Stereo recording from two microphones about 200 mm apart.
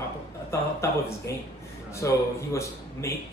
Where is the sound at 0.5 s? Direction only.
15° left (ahead or behind).